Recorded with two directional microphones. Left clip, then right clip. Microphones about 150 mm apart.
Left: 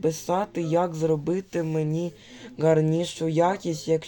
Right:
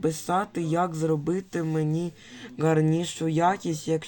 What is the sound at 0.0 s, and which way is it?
Speech, 5° right (ahead or behind).